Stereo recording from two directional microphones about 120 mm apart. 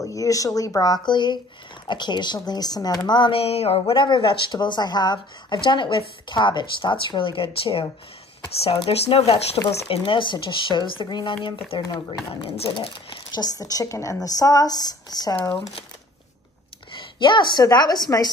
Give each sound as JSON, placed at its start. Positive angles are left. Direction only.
{"t": 0.0, "sound": "speech", "side_deg": 30}
{"t": 13.4, "sound": "speech", "side_deg": 30}
{"t": 16.9, "sound": "a woman's voice", "side_deg": 40}